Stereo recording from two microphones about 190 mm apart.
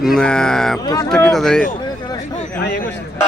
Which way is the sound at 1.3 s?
Centre (ahead or behind).